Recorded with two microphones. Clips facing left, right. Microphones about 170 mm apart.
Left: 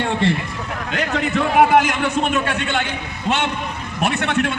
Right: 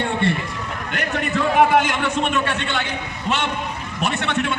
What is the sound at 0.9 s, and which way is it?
Speech, 90° left.